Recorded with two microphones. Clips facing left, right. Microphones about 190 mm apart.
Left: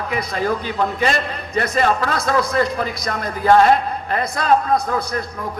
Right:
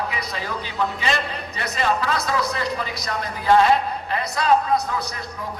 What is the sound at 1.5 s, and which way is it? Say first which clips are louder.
A man's voice: left 6 dB; 50° left (ahead or behind).